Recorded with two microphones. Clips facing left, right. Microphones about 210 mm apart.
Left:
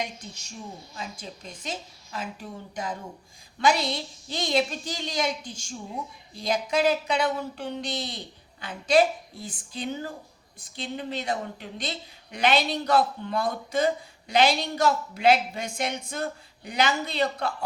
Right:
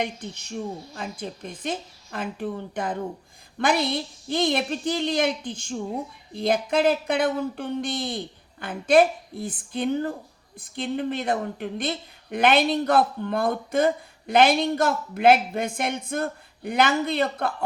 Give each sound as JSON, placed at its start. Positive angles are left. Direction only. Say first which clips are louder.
{"t": 0.0, "sound": "a woman's voice", "louder": "right 5 dB", "side_deg": -60}